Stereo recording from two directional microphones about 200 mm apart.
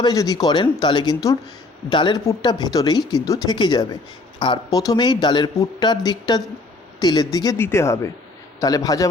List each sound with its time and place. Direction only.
0.0 s speech: 20° left (ahead or behind)